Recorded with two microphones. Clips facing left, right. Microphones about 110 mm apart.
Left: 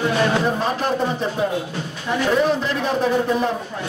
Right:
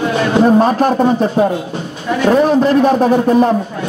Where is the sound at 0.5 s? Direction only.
50° right (ahead or behind).